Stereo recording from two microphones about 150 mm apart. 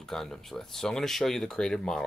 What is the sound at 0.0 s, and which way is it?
Speech, 5° left (ahead or behind).